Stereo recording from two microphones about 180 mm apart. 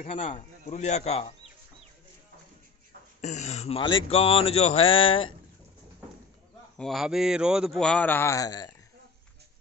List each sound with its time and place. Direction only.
0.0 s speech: 35° left (ahead or behind)
3.2 s speech: 40° left (ahead or behind)
6.8 s a man's voice: centre (ahead or behind); by 8.7 s 20° left (ahead or behind)